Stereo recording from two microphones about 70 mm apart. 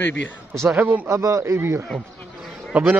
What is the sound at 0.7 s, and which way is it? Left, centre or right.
Speech, right.